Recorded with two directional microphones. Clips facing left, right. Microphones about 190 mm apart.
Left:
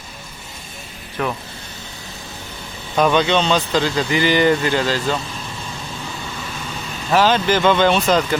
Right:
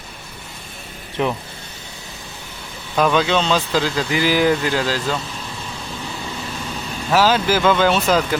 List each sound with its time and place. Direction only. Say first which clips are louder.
1.2 s speech: right 2 dB; 20° right (ahead or behind)
2.9 s speech: left 1 dB; centre (ahead or behind)
7.1 s speech: even; 5° right (ahead or behind)